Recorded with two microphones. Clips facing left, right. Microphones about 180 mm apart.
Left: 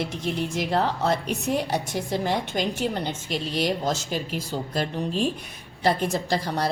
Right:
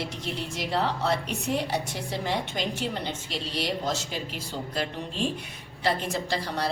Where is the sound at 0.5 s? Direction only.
50° left (ahead or behind).